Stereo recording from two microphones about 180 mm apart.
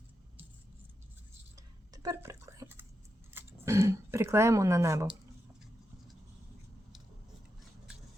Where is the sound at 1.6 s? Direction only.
20° right (ahead or behind).